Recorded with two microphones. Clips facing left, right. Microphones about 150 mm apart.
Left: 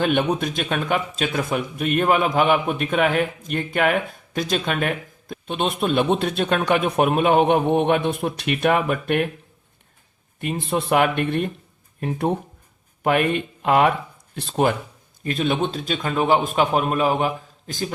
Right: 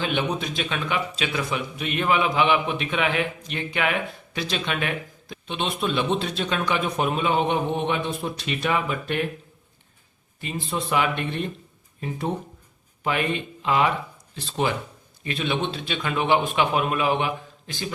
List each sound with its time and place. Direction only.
0.0 s speech: 55° left (ahead or behind)
10.4 s speech: 55° left (ahead or behind)